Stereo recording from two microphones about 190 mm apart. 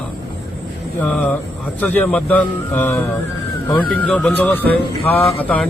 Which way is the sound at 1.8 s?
10° left (ahead or behind).